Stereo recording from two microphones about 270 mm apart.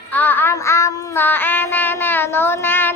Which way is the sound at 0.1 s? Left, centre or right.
Centre.